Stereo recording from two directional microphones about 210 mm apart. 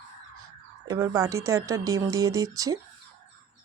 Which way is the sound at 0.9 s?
15° right (ahead or behind).